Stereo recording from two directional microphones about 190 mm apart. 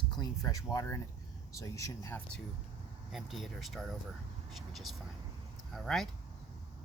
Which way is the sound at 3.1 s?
Centre (ahead or behind).